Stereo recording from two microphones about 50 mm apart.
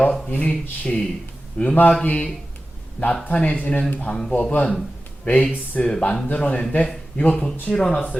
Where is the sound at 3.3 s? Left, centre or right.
Left.